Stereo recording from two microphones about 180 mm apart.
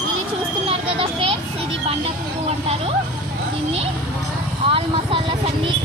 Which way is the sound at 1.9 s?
35° right (ahead or behind).